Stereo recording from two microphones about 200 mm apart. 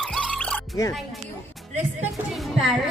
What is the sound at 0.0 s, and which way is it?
Music, 5° left (ahead or behind).